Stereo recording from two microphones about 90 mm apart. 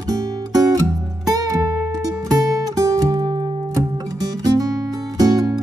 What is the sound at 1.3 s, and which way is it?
Music, 40° right (ahead or behind).